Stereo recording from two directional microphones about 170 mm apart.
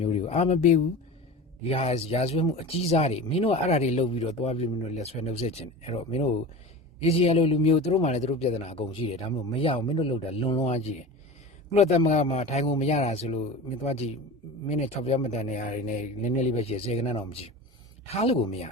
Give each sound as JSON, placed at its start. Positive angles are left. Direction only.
{"t": 0.0, "sound": "speech", "side_deg": 40}